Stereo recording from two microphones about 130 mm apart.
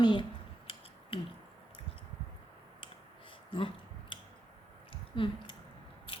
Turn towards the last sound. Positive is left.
turn(degrees=40)  # may be behind; listen again after turning